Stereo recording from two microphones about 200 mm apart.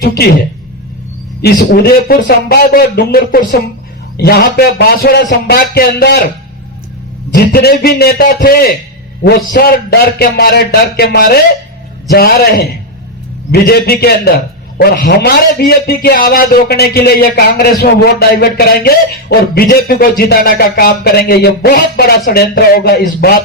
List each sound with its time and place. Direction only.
0.0 s a man's voice: 50° left (ahead or behind)
1.4 s a man's voice: 50° left (ahead or behind)
7.3 s a man's voice: 50° left (ahead or behind)